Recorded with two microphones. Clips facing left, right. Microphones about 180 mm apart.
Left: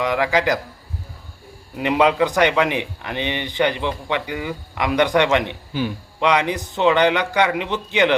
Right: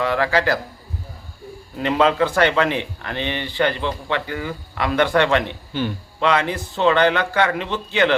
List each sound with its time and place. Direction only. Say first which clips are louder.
0.0 s speech: even; 15° left (ahead or behind)
1.7 s speech: left 1 dB; 15° left (ahead or behind)